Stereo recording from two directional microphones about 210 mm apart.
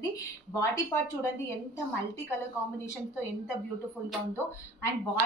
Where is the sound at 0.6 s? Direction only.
15° left (ahead or behind).